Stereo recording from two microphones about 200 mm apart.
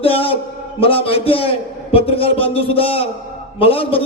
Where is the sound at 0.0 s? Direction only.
30° left (ahead or behind).